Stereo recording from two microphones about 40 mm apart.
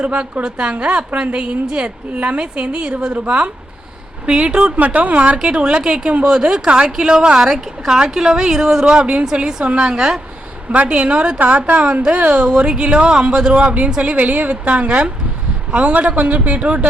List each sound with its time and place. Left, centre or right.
0.0 s a woman's voice: right
2.1 s a woman's voice: right
5.4 s a woman's voice: right
7.4 s a woman's voice: centre; by 16.8 s right